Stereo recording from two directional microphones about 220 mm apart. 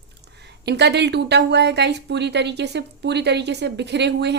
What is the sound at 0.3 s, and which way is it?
Speech, 50° right (ahead or behind).